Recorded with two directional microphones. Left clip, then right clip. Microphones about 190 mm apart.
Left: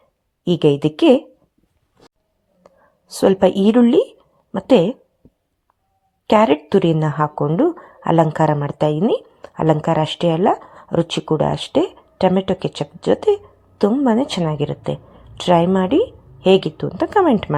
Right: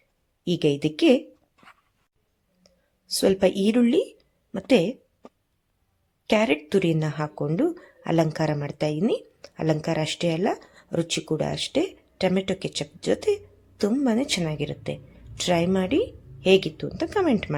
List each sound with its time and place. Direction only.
0.4 s a woman's voice: centre (ahead or behind)
3.2 s a woman's voice: centre (ahead or behind)
6.2 s a woman's voice: centre (ahead or behind)